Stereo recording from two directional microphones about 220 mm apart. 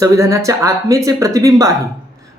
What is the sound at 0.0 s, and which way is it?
Speech, 15° right (ahead or behind).